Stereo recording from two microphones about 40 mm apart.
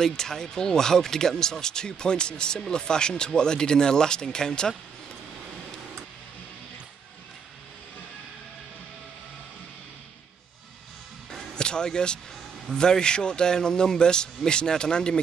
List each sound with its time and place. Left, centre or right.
0.0 s a man's voice: centre
11.5 s a man's voice: left